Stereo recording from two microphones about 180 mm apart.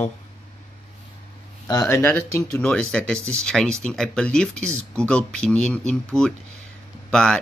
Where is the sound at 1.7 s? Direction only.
15° left (ahead or behind).